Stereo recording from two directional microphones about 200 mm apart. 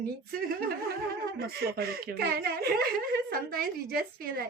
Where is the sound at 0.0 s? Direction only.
50° right (ahead or behind).